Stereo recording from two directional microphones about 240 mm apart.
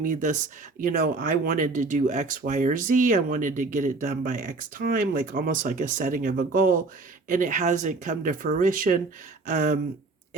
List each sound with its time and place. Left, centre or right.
0.0 s speech: right